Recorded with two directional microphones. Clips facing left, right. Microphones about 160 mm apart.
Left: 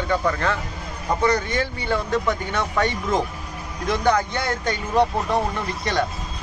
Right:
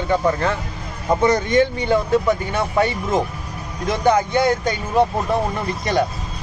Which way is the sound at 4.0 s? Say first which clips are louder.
Right 6 dB; 15° right (ahead or behind).